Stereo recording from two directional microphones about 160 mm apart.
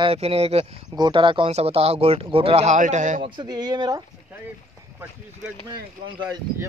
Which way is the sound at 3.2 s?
25° right (ahead or behind).